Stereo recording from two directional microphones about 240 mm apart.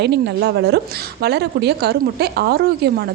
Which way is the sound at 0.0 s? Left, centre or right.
Right.